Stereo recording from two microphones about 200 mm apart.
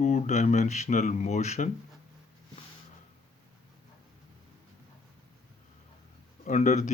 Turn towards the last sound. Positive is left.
turn(degrees=35)  # may be behind; listen again after turning